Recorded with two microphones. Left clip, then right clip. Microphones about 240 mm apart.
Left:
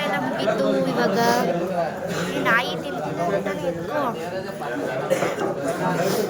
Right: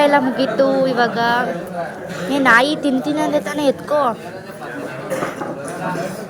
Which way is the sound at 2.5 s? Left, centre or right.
Centre.